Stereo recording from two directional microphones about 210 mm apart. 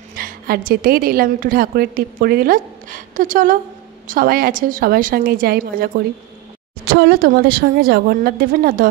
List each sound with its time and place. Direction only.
0.1 s a woman's voice: 45° right (ahead or behind)